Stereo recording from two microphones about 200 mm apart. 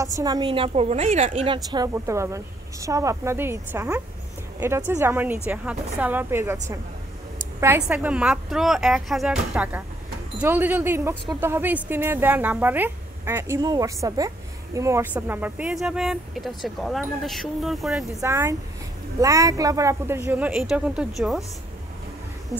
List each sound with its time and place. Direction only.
0.2 s a woman's voice: 20° right (ahead or behind)
7.6 s a woman's voice: 10° right (ahead or behind)
18.2 s speech: 15° right (ahead or behind)